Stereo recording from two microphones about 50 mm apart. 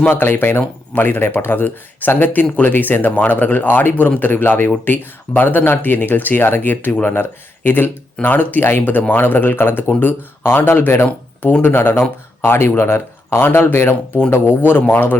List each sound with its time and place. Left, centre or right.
0.1 s speech: left
13.7 s speech: left